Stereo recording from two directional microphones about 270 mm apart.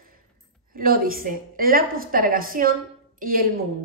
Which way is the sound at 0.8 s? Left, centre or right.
Right.